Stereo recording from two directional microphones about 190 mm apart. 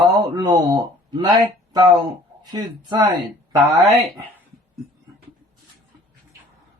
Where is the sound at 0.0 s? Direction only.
20° right (ahead or behind).